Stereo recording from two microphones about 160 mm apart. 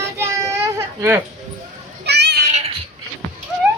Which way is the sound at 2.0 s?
90° right.